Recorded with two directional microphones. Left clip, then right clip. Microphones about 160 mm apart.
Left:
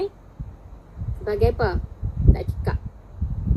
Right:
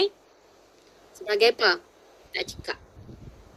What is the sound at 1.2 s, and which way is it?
Speech, 25° right (ahead or behind).